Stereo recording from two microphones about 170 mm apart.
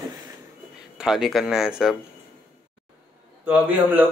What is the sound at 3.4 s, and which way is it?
Speech, 10° right (ahead or behind).